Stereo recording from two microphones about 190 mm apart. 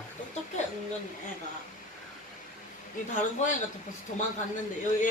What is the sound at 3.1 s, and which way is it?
Speech, 40° left (ahead or behind).